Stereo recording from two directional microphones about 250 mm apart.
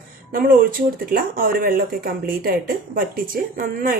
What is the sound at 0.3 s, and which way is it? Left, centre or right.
Speech, right.